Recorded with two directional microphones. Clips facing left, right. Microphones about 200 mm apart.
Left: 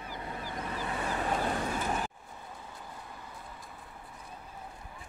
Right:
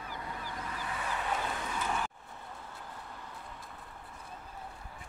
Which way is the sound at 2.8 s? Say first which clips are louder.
Even; 10° left (ahead or behind).